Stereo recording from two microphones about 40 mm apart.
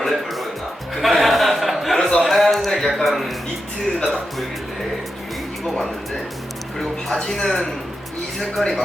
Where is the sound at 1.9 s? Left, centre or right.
Centre.